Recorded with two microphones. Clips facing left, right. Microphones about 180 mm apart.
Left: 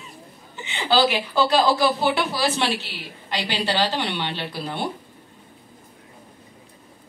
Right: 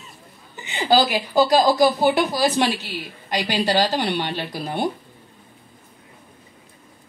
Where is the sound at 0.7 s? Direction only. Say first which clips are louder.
Right 2 dB; 40° right (ahead or behind).